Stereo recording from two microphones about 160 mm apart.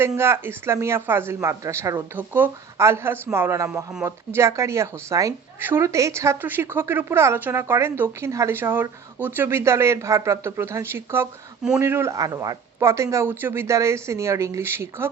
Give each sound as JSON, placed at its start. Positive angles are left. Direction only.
{"t": 0.2, "sound": "a woman's voice", "side_deg": -15}